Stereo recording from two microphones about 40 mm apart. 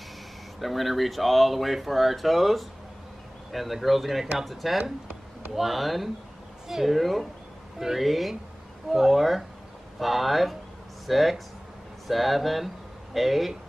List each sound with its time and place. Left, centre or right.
0.6 s speech: centre
4.7 s speech: centre
5.5 s speech: centre